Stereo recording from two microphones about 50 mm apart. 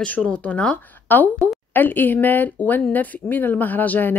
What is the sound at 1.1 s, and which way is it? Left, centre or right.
Speech, left.